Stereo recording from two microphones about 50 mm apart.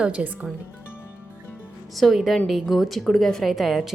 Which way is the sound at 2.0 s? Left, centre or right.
Centre.